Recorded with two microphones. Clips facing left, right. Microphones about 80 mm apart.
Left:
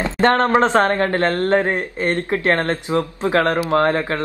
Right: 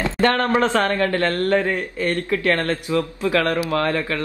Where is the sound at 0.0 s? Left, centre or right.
Left.